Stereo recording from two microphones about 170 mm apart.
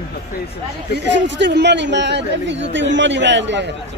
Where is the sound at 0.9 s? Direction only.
90° right.